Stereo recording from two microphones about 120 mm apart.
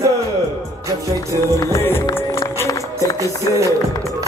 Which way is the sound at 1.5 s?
20° left (ahead or behind).